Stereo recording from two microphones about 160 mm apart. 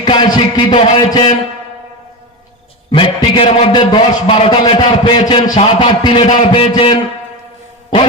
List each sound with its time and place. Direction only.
0.0 s a man's voice: 30° left (ahead or behind)
2.9 s a man's voice: 35° left (ahead or behind)